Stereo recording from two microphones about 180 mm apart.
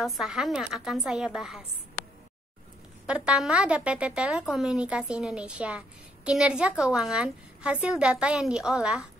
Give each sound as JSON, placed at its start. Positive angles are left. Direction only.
{"t": 0.0, "sound": "speech", "side_deg": 0}
{"t": 3.1, "sound": "speech", "side_deg": -5}